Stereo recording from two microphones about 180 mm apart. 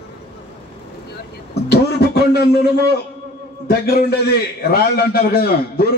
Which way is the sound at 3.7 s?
55° left (ahead or behind).